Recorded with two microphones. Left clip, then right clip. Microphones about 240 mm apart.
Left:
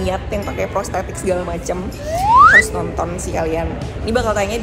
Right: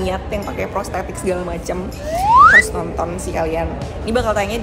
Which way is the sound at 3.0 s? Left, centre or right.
Centre.